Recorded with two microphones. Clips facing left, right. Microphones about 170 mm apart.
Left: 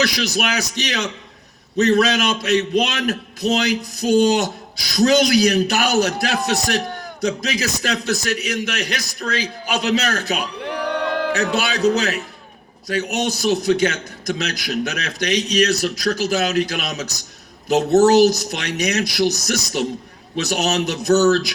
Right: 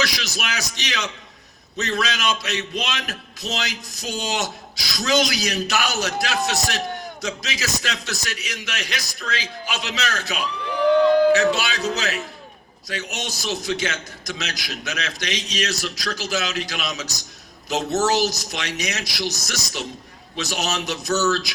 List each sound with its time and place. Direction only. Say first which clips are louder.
0.0 s a man's voice: left 6 dB; 50° left (ahead or behind)